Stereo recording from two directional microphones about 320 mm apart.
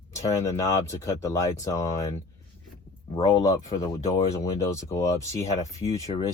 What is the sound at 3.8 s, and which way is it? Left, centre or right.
Speech, centre.